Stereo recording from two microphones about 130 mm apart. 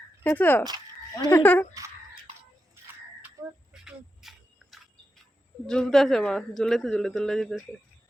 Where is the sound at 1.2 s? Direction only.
15° left (ahead or behind).